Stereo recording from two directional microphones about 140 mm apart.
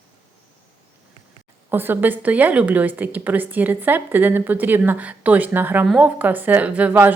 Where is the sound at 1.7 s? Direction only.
15° right (ahead or behind).